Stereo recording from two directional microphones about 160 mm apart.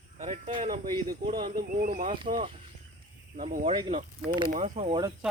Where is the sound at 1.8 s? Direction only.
55° right (ahead or behind).